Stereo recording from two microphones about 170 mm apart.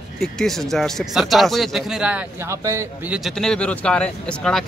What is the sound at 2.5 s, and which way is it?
Speech, 15° right (ahead or behind).